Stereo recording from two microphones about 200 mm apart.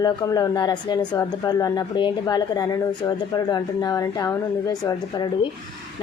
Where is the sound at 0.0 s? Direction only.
20° left (ahead or behind).